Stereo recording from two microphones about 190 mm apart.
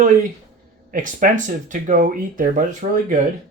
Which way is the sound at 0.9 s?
45° right (ahead or behind).